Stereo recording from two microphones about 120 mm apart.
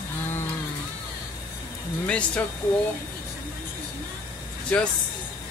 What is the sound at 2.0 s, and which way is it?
Speech, 10° left (ahead or behind).